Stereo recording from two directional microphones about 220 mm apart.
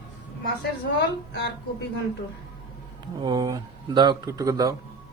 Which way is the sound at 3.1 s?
20° right (ahead or behind).